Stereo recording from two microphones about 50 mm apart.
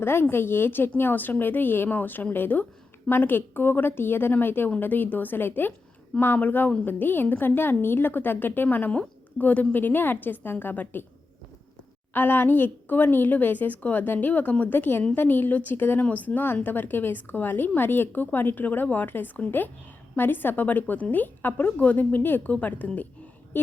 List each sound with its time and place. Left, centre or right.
0.0 s a woman's voice: left
8.9 s a woman's voice: left
12.1 s a woman's voice: left